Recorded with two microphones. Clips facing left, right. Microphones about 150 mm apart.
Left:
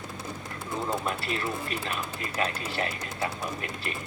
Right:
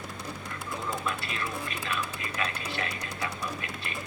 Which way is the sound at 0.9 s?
35° left (ahead or behind).